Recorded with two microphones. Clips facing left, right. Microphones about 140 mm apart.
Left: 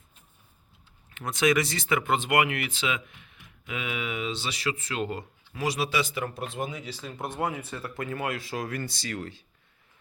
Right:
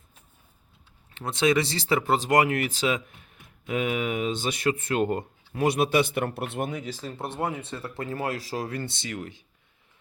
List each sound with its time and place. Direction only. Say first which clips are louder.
1.1 s speech: right 1 dB; 30° right (ahead or behind); by 7.1 s 45° right (ahead or behind)
7.2 s speech: even; 25° right (ahead or behind)